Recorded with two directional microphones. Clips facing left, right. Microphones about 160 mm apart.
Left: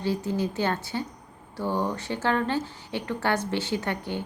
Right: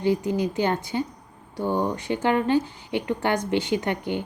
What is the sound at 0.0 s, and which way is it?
Speech, 15° right (ahead or behind).